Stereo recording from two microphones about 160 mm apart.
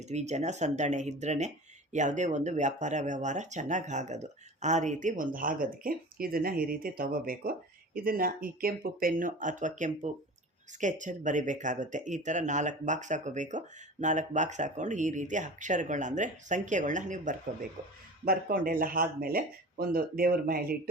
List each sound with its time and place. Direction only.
0.0 s speech: 45° right (ahead or behind)
18.3 s speech: 65° right (ahead or behind)